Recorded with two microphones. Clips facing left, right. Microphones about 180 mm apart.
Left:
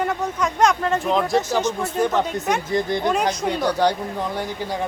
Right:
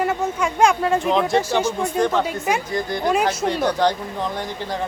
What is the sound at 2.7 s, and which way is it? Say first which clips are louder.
Speech: left 3 dB; 20° left (ahead or behind).